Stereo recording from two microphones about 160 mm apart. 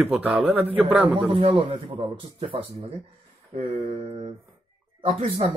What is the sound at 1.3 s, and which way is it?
Speech, 35° right (ahead or behind).